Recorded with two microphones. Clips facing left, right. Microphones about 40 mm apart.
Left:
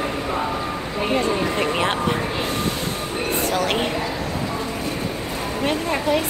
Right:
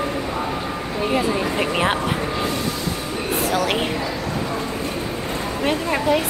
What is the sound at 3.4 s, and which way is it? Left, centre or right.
Speech, centre.